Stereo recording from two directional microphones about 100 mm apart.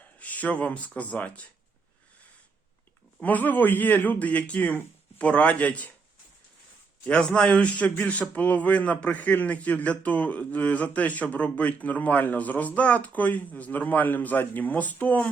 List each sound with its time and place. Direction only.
0.2 s a man's voice: 15° left (ahead or behind)
3.2 s a man's voice: 15° left (ahead or behind)
7.1 s a man's voice: 10° left (ahead or behind)